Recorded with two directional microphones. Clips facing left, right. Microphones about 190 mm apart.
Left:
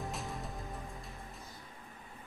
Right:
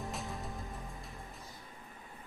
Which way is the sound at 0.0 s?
Centre (ahead or behind).